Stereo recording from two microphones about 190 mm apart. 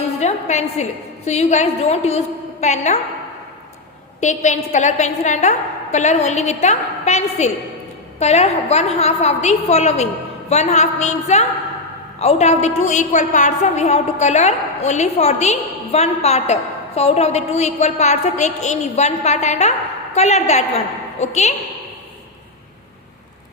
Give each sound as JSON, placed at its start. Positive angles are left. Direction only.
{"t": 0.2, "sound": "a woman's voice", "side_deg": 35}
{"t": 4.2, "sound": "a woman's voice", "side_deg": 40}